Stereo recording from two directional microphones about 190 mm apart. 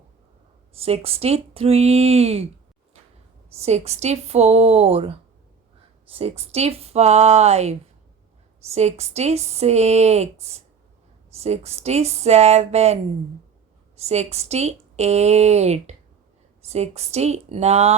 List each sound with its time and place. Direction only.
0.7 s a woman's voice: 30° right (ahead or behind)
3.6 s a woman's voice: 35° right (ahead or behind)